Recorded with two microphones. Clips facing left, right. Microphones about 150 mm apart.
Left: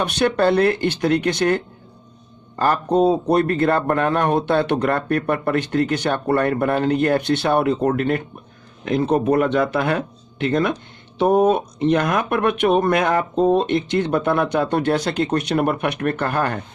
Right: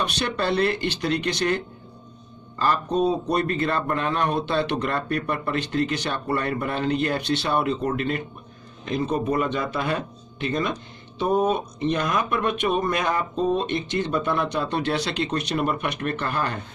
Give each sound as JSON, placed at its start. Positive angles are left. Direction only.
{"t": 0.0, "sound": "a man's voice", "side_deg": 55}